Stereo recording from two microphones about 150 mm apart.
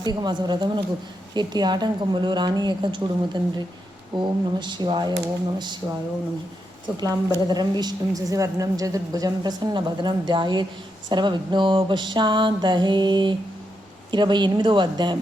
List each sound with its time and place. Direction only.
0.0 s a woman's voice: 30° right (ahead or behind)
6.9 s a woman's voice: 25° right (ahead or behind)
11.1 s a sound: 30° right (ahead or behind)